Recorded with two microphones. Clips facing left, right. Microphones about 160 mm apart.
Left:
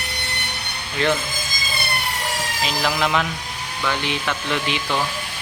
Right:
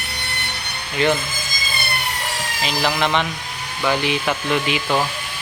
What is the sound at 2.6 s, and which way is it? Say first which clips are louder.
Speech: right 2 dB; centre (ahead or behind).